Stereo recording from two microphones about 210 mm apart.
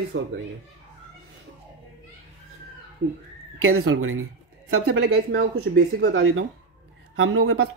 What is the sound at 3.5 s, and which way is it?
Speech, 85° right.